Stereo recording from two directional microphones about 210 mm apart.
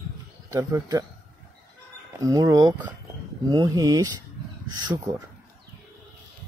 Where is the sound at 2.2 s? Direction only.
15° right (ahead or behind).